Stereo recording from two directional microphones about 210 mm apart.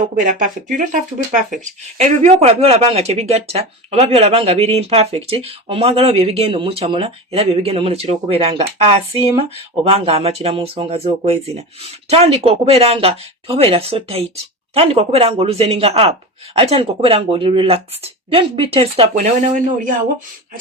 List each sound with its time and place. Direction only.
0.0 s speech: 40° right (ahead or behind)
2.0 s speech: 30° right (ahead or behind)